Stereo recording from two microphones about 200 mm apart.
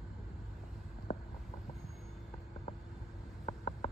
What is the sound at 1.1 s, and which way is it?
Vehicle, 30° left (ahead or behind).